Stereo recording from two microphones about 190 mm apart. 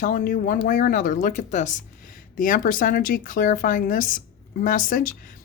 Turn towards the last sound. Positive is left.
turn(degrees=45)  # may be behind; listen again after turning